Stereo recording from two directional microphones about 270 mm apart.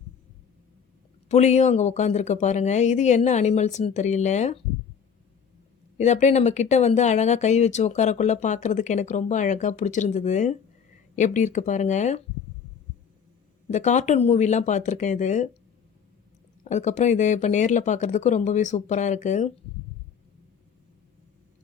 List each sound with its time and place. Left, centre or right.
1.3 s speech: left
6.0 s speech: left
13.7 s speech: left
16.6 s speech: left